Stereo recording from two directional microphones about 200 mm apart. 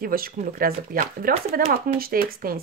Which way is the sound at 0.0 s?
45° right (ahead or behind).